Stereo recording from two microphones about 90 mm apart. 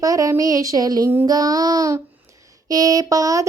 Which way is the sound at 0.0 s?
40° right (ahead or behind).